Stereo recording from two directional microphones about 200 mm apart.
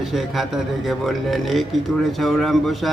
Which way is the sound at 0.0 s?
Centre (ahead or behind).